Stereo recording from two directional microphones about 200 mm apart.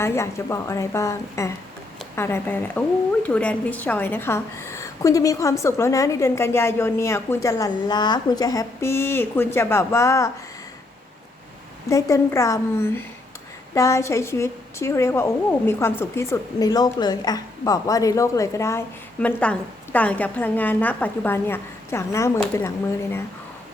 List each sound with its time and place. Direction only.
0.0 s a woman's voice: 15° left (ahead or behind)
11.9 s a woman's voice: 15° left (ahead or behind)